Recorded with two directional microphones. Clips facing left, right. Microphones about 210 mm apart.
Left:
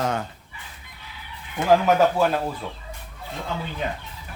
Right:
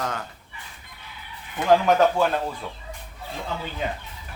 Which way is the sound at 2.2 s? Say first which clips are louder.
Left 1 dB; 5° left (ahead or behind).